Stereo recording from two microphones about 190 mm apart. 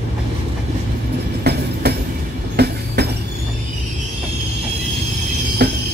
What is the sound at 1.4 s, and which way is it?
Train, 60° right (ahead or behind).